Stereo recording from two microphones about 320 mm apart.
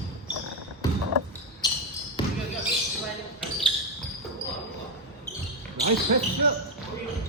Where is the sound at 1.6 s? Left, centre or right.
Centre.